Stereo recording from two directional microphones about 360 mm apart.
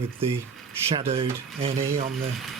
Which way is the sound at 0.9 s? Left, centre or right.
Centre.